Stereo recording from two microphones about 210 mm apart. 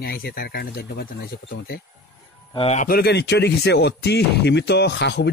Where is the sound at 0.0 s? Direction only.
45° left (ahead or behind).